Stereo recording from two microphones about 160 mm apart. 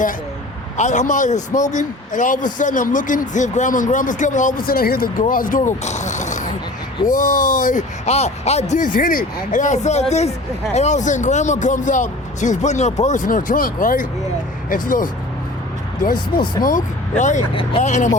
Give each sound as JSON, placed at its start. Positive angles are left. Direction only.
{"t": 0.8, "sound": "a man's voice", "side_deg": 50}
{"t": 16.3, "sound": "speech", "side_deg": 70}
{"t": 16.6, "sound": "a man's voice", "side_deg": 50}
{"t": 17.5, "sound": "speech", "side_deg": 35}
{"t": 17.8, "sound": "a man's voice", "side_deg": 45}